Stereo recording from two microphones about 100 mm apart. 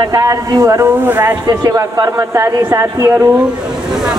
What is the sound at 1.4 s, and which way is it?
Speech, 35° right (ahead or behind).